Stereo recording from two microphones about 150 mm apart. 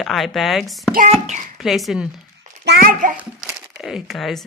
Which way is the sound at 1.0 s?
50° right (ahead or behind).